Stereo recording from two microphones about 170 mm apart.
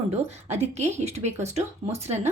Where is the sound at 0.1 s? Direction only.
40° right (ahead or behind).